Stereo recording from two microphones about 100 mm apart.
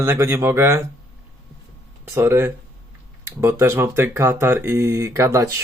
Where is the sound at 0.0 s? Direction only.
30° right (ahead or behind).